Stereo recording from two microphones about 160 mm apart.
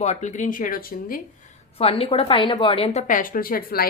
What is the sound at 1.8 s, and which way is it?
A woman's voice, 35° left (ahead or behind).